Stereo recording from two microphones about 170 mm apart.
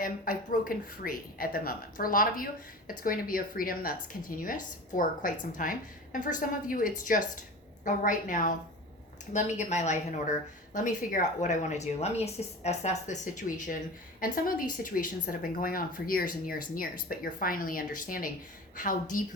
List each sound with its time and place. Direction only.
0.0 s a woman's voice: 55° left (ahead or behind)